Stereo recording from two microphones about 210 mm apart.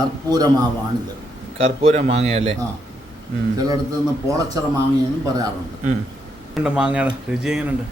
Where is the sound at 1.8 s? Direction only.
30° right (ahead or behind).